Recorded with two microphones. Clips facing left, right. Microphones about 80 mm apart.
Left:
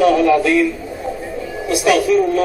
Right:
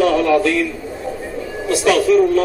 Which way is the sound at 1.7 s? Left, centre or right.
Centre.